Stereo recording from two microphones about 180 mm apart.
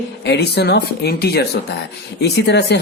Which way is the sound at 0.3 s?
70° left (ahead or behind).